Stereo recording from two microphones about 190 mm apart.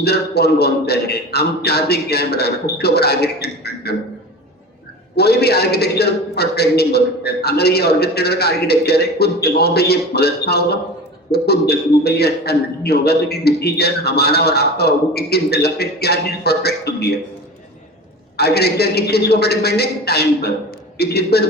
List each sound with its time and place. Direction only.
0.0 s a man's voice: 55° left (ahead or behind)
5.1 s a man's voice: 55° left (ahead or behind)
18.3 s a man's voice: 60° left (ahead or behind)